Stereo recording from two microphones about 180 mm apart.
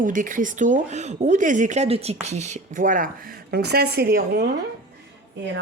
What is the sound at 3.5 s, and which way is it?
Speech, 60° right (ahead or behind).